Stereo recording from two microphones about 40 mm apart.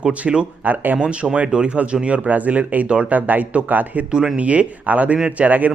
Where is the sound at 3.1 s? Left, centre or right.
Right.